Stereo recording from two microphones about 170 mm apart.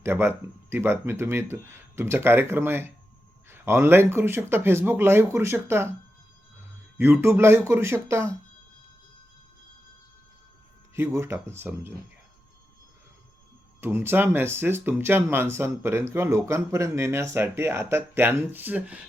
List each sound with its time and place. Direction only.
0.0 s speech: 15° right (ahead or behind)
10.9 s speech: 15° right (ahead or behind)
13.8 s speech: 15° right (ahead or behind)